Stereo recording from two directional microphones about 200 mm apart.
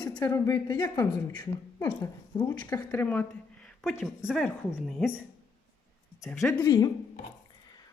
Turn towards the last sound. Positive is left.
turn(degrees=20)  # may be behind; listen again after turning